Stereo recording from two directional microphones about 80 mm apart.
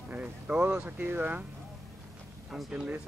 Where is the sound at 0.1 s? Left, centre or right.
Centre.